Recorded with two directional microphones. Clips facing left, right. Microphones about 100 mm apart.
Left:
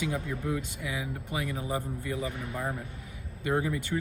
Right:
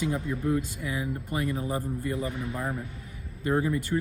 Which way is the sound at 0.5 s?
40° right (ahead or behind).